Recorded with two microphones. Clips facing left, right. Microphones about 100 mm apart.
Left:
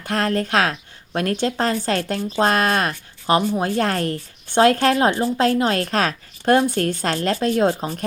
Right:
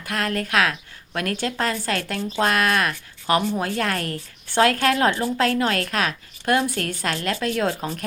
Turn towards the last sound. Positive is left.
turn(degrees=25)  # may be behind; listen again after turning